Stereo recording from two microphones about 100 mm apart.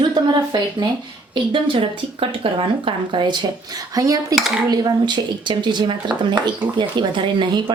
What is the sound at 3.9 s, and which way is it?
Speech, 35° right (ahead or behind).